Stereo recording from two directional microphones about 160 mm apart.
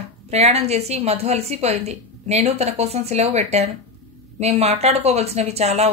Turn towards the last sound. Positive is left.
turn(degrees=-40)  # may be behind; listen again after turning